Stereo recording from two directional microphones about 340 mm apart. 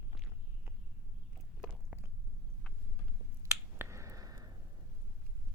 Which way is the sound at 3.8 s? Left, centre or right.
Centre.